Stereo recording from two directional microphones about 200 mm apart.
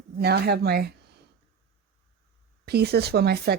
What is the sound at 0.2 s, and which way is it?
Speech, 50° right (ahead or behind).